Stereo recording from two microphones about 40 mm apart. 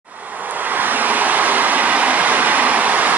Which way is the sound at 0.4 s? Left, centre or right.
Right.